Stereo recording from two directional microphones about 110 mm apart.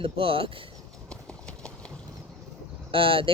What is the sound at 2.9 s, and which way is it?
Speech, 55° right (ahead or behind).